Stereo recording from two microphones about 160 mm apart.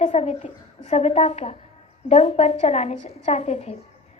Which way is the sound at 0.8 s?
45° left (ahead or behind).